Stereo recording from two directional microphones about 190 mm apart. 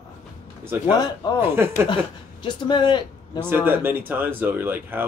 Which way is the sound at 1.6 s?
15° right (ahead or behind).